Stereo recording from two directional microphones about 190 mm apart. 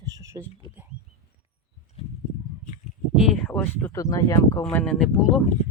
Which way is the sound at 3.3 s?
5° left (ahead or behind).